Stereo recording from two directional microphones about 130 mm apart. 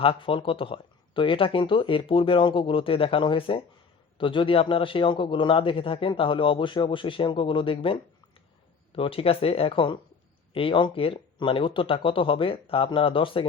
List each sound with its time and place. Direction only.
0.0 s a man's voice: 45° left (ahead or behind)